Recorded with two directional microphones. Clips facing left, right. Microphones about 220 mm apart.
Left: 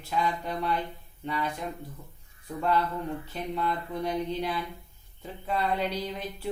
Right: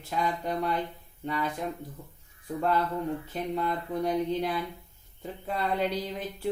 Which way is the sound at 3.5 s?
45° right (ahead or behind).